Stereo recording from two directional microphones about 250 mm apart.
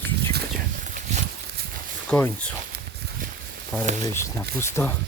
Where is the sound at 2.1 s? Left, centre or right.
Centre.